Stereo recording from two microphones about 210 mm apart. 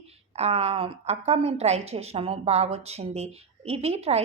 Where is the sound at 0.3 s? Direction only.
30° right (ahead or behind).